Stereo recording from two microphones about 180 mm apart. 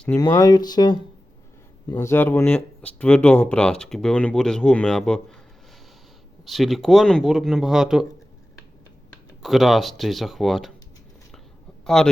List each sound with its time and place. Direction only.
0.2 s speech: 20° left (ahead or behind); by 5.2 s 5° left (ahead or behind)
6.4 s speech: centre (ahead or behind)
9.4 s speech: centre (ahead or behind)
11.9 s speech: 5° left (ahead or behind)